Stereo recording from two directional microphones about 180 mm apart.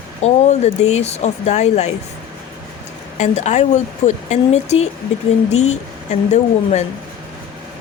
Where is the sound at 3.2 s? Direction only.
40° left (ahead or behind).